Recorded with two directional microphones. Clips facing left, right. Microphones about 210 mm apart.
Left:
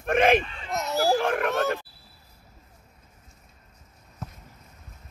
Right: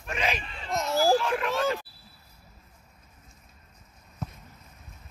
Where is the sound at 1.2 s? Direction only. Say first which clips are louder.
Left 3 dB; 55° left (ahead or behind).